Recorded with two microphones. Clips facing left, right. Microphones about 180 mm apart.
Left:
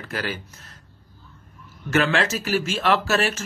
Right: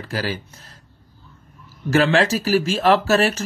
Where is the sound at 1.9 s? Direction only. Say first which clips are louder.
Right 4 dB; 35° right (ahead or behind).